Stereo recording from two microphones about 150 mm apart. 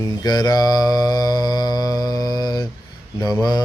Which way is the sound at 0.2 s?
25° left (ahead or behind).